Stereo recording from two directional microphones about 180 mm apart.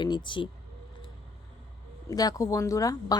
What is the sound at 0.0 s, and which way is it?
Speech, 25° left (ahead or behind).